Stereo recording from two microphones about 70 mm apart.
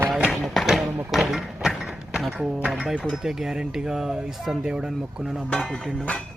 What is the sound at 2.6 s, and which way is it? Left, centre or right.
Speech, centre.